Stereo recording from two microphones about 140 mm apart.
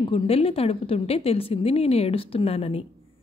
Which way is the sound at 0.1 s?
45° left (ahead or behind).